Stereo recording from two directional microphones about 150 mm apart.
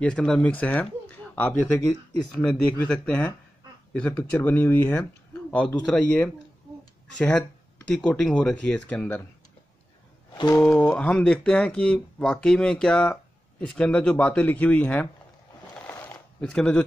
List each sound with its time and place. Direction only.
0.0 s speech: 5° left (ahead or behind)
10.3 s speech: 25° left (ahead or behind)
10.6 s speech: 10° left (ahead or behind)
15.9 s a sound: 10° left (ahead or behind)